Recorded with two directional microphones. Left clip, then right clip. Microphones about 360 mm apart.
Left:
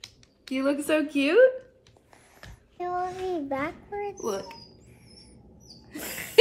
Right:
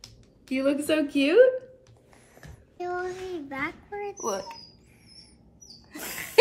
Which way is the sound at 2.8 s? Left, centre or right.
Left.